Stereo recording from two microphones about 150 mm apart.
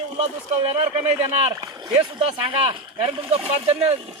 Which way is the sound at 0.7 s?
45° right (ahead or behind).